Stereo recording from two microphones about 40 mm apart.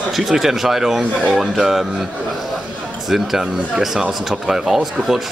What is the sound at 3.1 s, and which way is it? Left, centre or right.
A man's voice, centre.